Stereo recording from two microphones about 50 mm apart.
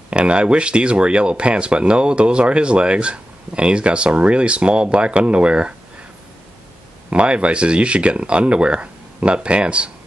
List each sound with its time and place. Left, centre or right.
0.1 s speech: right
7.1 s speech: right